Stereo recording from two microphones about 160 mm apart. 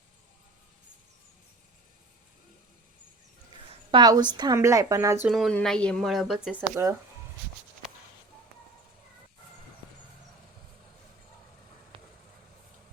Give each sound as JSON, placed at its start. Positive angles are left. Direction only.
{"t": 3.9, "sound": "speech", "side_deg": -25}
{"t": 5.3, "sound": "speech", "side_deg": 0}
{"t": 11.9, "sound": "a sound", "side_deg": -35}